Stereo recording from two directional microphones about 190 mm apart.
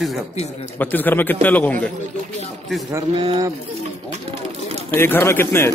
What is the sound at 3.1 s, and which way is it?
Speech, 25° right (ahead or behind).